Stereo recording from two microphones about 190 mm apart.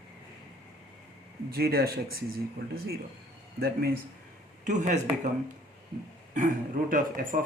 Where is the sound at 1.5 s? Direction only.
55° right (ahead or behind).